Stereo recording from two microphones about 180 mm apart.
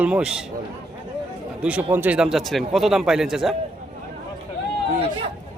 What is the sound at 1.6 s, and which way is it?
Speech, 10° right (ahead or behind).